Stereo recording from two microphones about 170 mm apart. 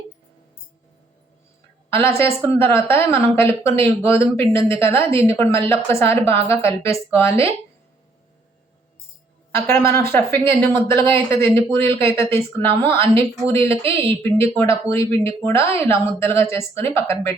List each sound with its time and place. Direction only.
2.0 s speech: 15° left (ahead or behind)
9.6 s speech: 15° left (ahead or behind)